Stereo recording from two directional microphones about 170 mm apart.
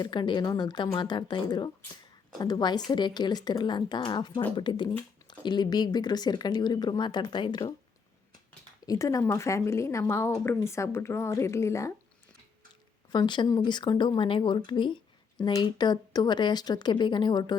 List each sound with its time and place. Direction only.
0.0 s speech: 25° left (ahead or behind)
8.9 s a woman's voice: 20° left (ahead or behind)
13.1 s speech: 25° left (ahead or behind)